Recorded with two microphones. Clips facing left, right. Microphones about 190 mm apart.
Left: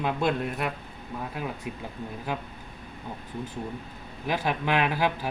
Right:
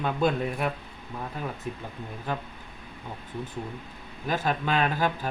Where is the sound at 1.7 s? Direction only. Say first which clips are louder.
Right 1 dB; 15° left (ahead or behind).